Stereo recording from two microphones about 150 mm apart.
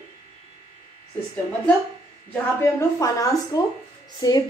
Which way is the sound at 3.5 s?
25° left (ahead or behind).